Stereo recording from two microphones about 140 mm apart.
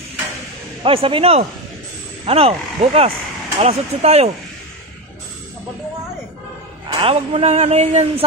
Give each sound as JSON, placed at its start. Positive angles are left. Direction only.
{"t": 0.8, "sound": "speech", "side_deg": -40}
{"t": 7.0, "sound": "speech", "side_deg": -45}